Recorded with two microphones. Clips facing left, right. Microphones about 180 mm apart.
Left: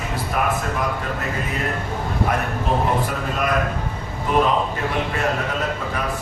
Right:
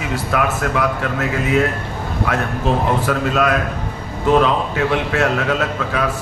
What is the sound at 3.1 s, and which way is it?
Speech, 90° right.